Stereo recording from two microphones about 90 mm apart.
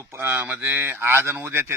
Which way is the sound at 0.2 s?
20° right (ahead or behind).